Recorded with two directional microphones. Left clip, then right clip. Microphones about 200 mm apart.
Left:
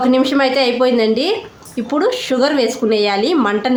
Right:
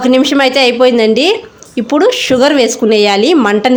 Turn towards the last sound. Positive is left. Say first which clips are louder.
# right 6 dB
turn(degrees=-35)  # may be behind; listen again after turning